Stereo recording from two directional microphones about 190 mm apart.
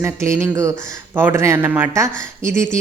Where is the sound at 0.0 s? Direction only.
15° right (ahead or behind).